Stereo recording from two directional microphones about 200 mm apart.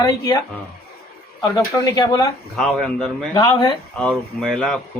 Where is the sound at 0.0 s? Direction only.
15° left (ahead or behind).